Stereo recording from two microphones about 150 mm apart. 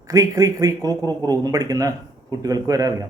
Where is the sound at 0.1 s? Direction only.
25° right (ahead or behind).